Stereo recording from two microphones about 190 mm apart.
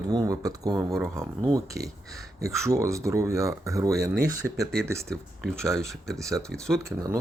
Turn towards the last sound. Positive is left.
turn(degrees=-15)  # may be behind; listen again after turning